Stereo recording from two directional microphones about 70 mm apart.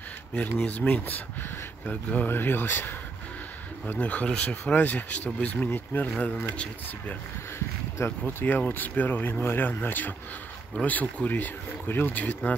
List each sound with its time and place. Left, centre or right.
0.3 s speech: centre
3.8 s speech: left
7.5 s speech: left